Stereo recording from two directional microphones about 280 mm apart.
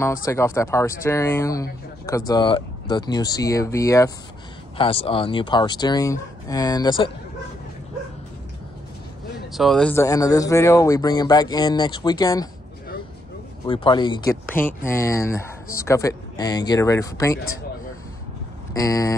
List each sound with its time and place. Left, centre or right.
0.0 s speech: centre
9.5 s speech: centre
13.7 s speech: centre
18.7 s speech: centre